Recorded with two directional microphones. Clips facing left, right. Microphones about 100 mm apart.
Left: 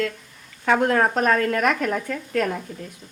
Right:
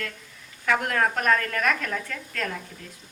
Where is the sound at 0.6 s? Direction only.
30° left (ahead or behind).